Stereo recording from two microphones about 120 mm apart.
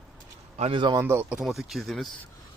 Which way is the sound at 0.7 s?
40° right (ahead or behind).